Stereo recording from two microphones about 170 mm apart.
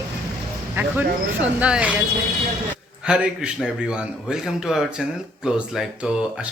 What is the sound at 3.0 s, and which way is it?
A man's voice, 5° right (ahead or behind).